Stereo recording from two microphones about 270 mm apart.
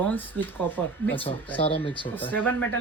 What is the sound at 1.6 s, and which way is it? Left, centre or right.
Speech, centre.